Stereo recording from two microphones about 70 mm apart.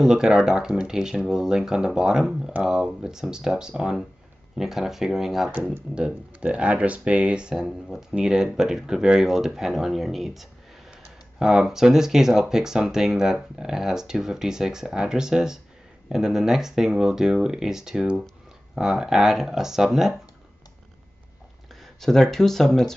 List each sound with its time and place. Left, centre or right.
0.0 s speech: centre
5.9 s speech: centre
22.0 s speech: centre